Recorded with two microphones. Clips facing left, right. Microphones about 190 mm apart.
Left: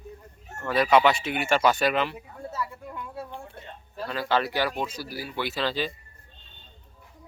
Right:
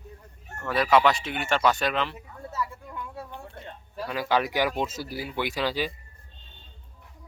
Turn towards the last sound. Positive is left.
turn(degrees=-10)  # may be behind; listen again after turning